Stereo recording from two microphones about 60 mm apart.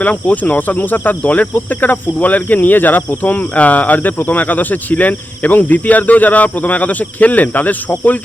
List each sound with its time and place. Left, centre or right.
0.0 s speech: left